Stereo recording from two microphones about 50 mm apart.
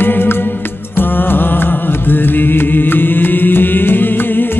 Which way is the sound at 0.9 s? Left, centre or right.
Left.